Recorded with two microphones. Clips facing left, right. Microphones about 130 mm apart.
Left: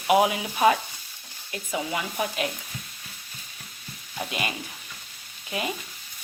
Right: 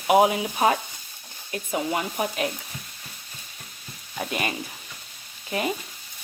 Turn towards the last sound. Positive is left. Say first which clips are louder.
# right 3 dB
turn(degrees=-40)  # may be behind; listen again after turning